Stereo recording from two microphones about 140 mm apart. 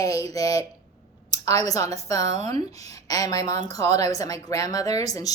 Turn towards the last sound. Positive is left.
turn(degrees=25)  # may be behind; listen again after turning